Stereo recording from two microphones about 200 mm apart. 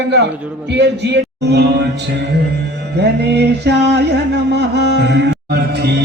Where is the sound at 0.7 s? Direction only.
55° right (ahead or behind).